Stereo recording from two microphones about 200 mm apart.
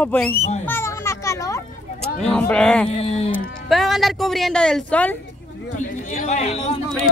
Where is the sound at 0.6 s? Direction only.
10° left (ahead or behind).